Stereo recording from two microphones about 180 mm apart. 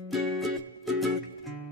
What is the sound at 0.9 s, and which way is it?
Music, centre (ahead or behind).